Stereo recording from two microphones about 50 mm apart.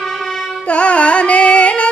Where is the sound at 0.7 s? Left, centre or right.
Left.